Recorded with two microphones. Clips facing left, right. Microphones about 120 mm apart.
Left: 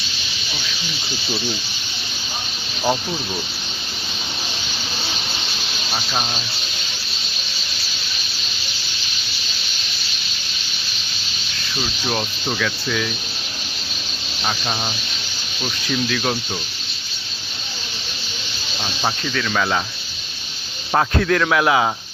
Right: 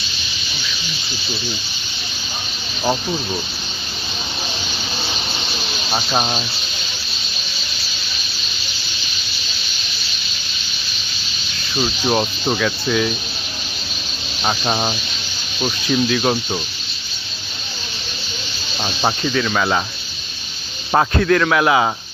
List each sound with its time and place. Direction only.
2.8 s a man's voice: centre (ahead or behind)
5.9 s speech: 40° right (ahead or behind)
11.8 s speech: 30° right (ahead or behind)
14.4 s speech: 35° right (ahead or behind)
15.9 s speech: 20° right (ahead or behind)
19.0 s speech: 20° right (ahead or behind)
20.9 s speech: 10° right (ahead or behind)
21.2 s a man's voice: centre (ahead or behind)